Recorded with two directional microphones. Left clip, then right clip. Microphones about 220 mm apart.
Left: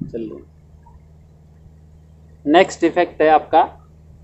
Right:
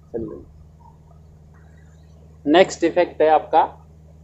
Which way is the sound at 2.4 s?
15° left (ahead or behind).